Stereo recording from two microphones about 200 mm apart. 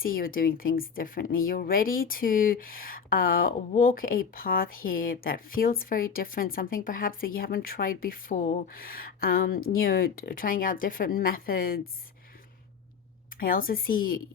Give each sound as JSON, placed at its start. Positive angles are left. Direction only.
{"t": 0.0, "sound": "speech", "side_deg": 45}
{"t": 13.3, "sound": "speech", "side_deg": 45}